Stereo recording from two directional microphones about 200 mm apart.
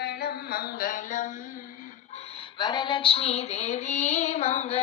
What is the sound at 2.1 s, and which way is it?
Female singing, 30° left (ahead or behind).